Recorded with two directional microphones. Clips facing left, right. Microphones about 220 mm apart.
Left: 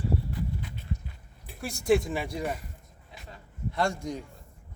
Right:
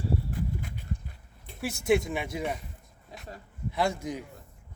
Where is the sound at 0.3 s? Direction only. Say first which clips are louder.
Right 1 dB; 45° right (ahead or behind).